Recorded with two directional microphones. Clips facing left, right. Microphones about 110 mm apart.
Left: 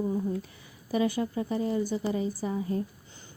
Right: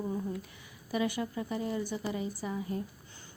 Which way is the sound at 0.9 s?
30° left (ahead or behind).